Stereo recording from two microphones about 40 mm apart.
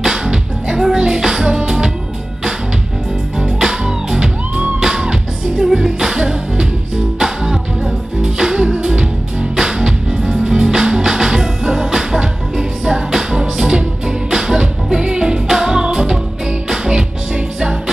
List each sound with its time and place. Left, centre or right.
0.0 s music: centre
3.5 s music: centre